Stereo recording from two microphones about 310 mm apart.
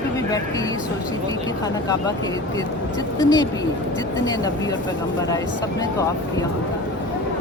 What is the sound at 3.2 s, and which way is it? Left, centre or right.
Speech, centre.